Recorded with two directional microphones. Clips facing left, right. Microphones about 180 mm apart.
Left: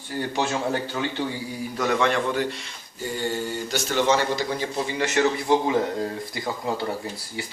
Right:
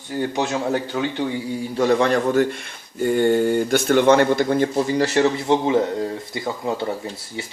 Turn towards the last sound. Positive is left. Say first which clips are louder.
# right 2 dB
turn(degrees=-25)  # may be behind; listen again after turning